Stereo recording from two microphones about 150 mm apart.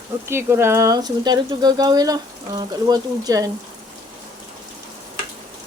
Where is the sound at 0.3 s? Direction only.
15° right (ahead or behind).